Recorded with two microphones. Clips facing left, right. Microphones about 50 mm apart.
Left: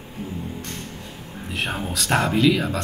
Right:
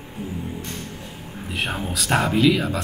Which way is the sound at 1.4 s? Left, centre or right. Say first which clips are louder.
Even; centre.